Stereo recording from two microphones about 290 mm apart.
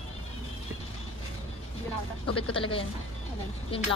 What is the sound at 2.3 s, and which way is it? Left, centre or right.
Speech, centre.